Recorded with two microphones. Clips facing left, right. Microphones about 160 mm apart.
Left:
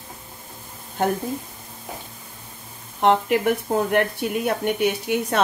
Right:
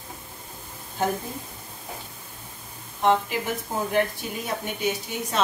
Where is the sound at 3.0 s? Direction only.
65° left (ahead or behind).